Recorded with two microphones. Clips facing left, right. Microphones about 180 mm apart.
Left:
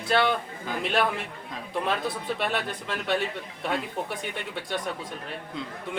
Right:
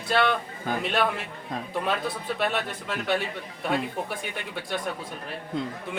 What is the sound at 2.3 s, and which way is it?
Speech, centre (ahead or behind).